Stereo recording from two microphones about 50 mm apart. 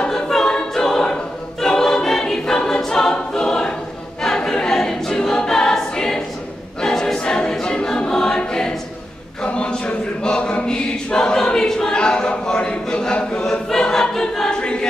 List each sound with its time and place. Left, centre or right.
0.0 s choir: centre